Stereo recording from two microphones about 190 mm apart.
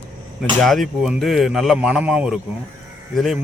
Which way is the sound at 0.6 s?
Centre (ahead or behind).